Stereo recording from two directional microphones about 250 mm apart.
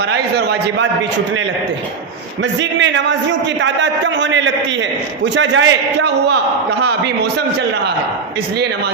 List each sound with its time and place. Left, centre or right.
0.0 s a man's voice: right
2.4 s a man's voice: right